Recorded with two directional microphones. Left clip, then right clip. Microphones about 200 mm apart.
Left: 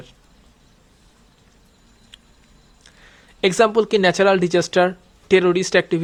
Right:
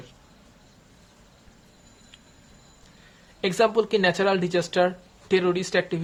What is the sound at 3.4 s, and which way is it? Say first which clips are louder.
Speech: left 6 dB; 35° left (ahead or behind).